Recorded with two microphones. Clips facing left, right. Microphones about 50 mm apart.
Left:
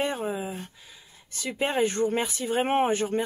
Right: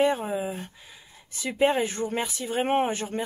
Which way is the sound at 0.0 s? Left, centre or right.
Centre.